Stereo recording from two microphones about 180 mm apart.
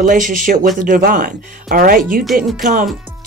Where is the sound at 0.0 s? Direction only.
50° right (ahead or behind).